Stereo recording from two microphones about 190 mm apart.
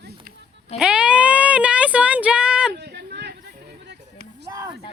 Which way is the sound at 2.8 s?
60° right (ahead or behind).